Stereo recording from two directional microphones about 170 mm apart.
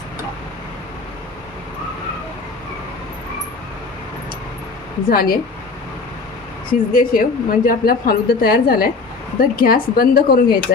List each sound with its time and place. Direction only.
5.0 s a woman's voice: 60° left (ahead or behind)
6.7 s a woman's voice: 55° left (ahead or behind)